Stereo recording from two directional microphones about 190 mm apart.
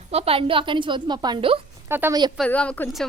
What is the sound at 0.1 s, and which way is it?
A woman's voice, 30° right (ahead or behind).